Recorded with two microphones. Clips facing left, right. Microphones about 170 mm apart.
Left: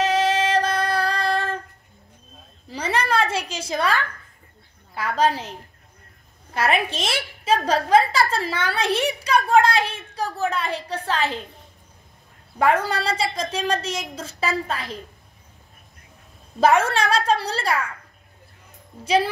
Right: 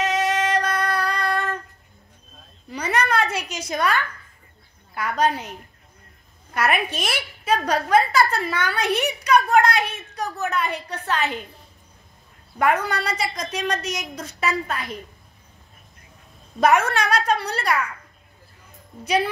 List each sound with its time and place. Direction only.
0.0 s female singing: 30° left (ahead or behind)
2.7 s a sound: 30° left (ahead or behind)
4.9 s a woman's voice: 30° left (ahead or behind)
12.5 s a woman's voice: 30° left (ahead or behind)
16.5 s a woman's voice: 30° left (ahead or behind)